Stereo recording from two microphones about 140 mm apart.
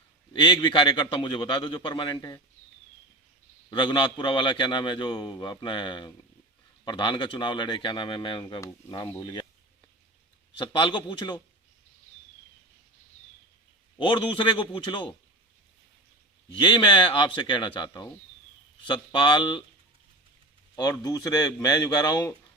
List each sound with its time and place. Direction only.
0.4 s a man's voice: 35° left (ahead or behind)
3.7 s a man's voice: 35° left (ahead or behind)
10.6 s a man's voice: 35° left (ahead or behind)
14.0 s a man's voice: 35° left (ahead or behind)
16.6 s a man's voice: 35° left (ahead or behind)
20.7 s speech: 25° left (ahead or behind)